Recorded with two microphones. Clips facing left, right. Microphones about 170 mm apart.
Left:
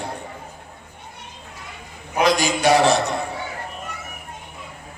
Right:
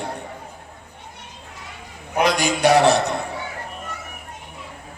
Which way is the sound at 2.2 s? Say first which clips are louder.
Even; 60° right (ahead or behind).